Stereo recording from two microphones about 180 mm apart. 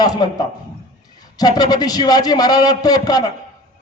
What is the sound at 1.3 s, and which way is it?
Speech, 20° left (ahead or behind).